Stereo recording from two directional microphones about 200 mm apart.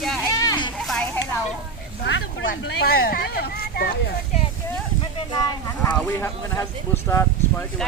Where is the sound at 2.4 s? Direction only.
50° left (ahead or behind).